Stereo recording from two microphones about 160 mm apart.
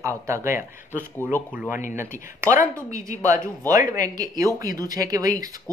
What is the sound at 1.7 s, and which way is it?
Speech, 55° left (ahead or behind).